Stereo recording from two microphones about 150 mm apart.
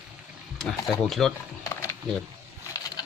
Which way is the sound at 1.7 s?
15° left (ahead or behind).